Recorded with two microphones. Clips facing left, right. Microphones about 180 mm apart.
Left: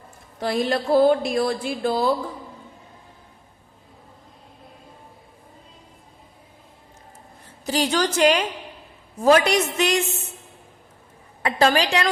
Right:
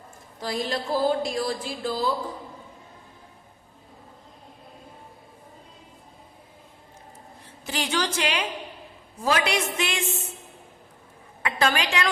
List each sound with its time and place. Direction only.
0.3 s speech: 60° left (ahead or behind)
7.6 s a woman's voice: 40° left (ahead or behind)
11.4 s a woman's voice: 35° left (ahead or behind)